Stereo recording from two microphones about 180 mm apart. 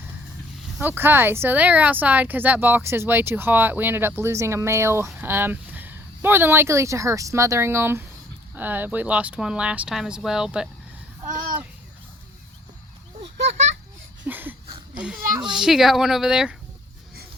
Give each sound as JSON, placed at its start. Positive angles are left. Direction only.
{"t": 0.8, "sound": "speech", "side_deg": -10}
{"t": 13.5, "sound": "speech", "side_deg": -40}
{"t": 14.3, "sound": "a sound", "side_deg": -10}
{"t": 15.4, "sound": "speech", "side_deg": -5}